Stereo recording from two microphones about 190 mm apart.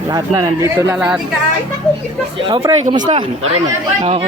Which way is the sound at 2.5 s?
25° right (ahead or behind).